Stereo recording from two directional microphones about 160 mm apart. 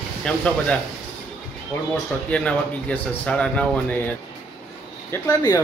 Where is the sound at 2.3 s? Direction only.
5° left (ahead or behind).